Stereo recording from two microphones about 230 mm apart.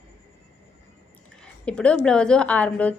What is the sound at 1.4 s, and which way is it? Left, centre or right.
Speech, centre.